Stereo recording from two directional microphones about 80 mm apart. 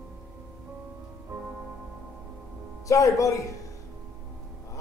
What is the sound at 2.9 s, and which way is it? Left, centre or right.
Speech, left.